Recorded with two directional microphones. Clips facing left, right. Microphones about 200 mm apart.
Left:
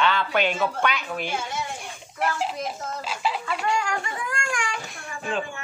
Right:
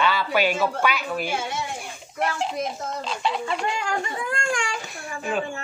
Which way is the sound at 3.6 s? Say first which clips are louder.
Even; 25° right (ahead or behind).